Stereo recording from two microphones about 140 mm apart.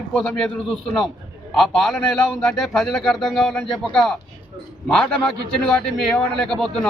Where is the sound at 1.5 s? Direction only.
Centre (ahead or behind).